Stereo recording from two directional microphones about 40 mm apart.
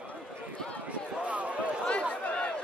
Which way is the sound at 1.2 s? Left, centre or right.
Right.